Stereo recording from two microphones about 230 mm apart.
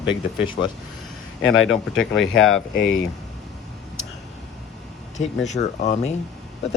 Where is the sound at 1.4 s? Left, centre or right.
Left.